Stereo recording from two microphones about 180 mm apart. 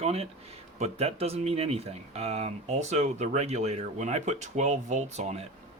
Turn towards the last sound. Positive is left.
turn(degrees=-40)  # may be behind; listen again after turning